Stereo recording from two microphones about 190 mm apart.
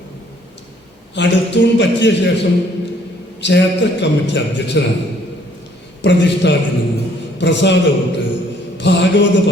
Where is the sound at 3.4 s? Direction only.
65° left (ahead or behind).